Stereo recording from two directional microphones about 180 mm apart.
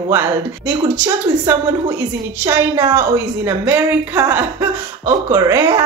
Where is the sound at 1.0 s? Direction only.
10° right (ahead or behind).